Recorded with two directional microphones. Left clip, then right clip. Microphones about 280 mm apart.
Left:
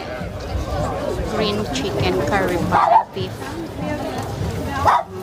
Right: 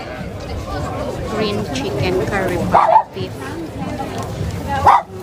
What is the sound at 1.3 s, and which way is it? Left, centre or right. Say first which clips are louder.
Speech: right 2 dB; centre.